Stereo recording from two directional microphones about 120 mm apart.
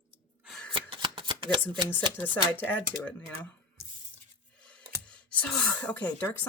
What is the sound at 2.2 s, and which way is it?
Speech, 15° left (ahead or behind).